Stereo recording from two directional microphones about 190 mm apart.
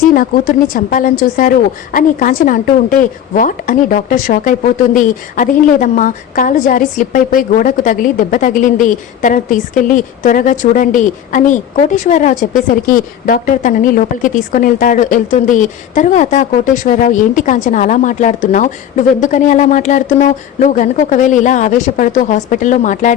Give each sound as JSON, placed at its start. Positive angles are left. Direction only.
{"t": 0.0, "sound": "a woman's voice", "side_deg": 45}